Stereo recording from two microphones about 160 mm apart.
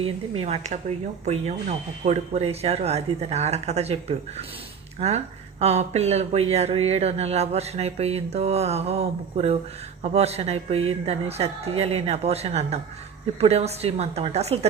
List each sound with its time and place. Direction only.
0.0 s speech: 40° right (ahead or behind)
4.9 s speech: 40° right (ahead or behind)